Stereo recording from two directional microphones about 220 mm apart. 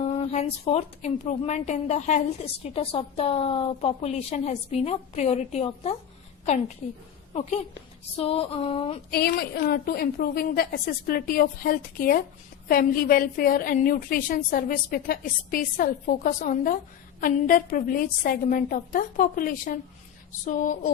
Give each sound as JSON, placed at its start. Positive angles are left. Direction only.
{"t": 0.0, "sound": "a woman's voice", "side_deg": 30}
{"t": 8.1, "sound": "a woman's voice", "side_deg": 25}
{"t": 9.0, "sound": "a woman's voice", "side_deg": 45}